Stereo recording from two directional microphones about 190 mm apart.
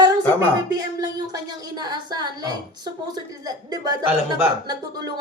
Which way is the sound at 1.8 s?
20° right (ahead or behind).